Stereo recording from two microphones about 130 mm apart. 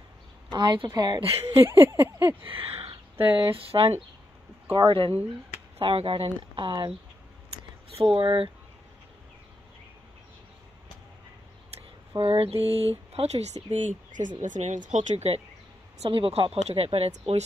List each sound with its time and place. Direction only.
0.5 s a woman's voice: 35° right (ahead or behind)
1.2 s speech: 50° right (ahead or behind)
1.7 s a sound: 20° right (ahead or behind)
2.5 s speech: 45° right (ahead or behind)
8.0 s speech: 40° right (ahead or behind)
12.2 s speech: 45° right (ahead or behind)